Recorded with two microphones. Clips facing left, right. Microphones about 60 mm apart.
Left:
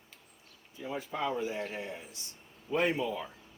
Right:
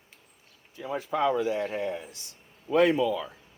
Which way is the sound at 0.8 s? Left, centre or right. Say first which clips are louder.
Right 8 dB; right.